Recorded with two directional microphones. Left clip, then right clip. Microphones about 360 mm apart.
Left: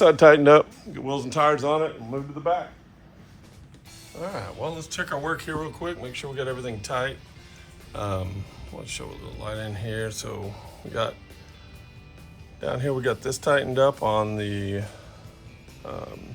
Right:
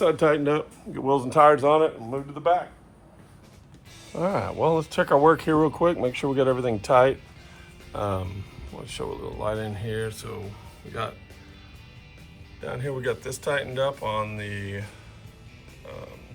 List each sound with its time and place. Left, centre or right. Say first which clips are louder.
0.0 s a man's voice: left 7 dB; left
0.9 s speech: right 5 dB; centre; by 2.6 s right
4.4 s speech: right 11 dB; centre
7.9 s speech: right 2 dB; centre
12.5 s speech: left 5 dB; centre